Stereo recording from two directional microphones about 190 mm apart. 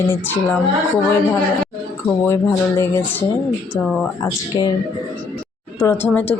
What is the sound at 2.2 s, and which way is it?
A woman's voice, 15° left (ahead or behind).